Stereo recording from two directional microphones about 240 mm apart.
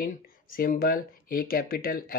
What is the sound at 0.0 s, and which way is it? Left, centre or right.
Speech, left.